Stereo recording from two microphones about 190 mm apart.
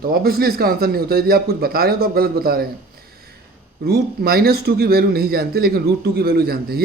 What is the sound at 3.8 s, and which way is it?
A man's voice, 55° right (ahead or behind).